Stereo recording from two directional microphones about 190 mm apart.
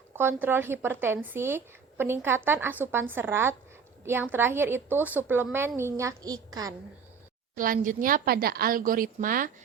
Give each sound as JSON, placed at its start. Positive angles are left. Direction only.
{"t": 0.2, "sound": "a woman's voice", "side_deg": -10}
{"t": 7.5, "sound": "a woman's voice", "side_deg": -45}